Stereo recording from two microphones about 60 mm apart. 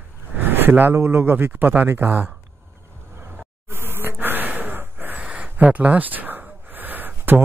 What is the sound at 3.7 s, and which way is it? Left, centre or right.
Breathing, right.